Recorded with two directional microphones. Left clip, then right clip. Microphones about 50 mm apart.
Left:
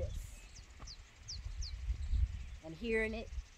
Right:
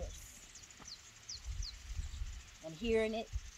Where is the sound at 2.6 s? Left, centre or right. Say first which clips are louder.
Right 2 dB; left.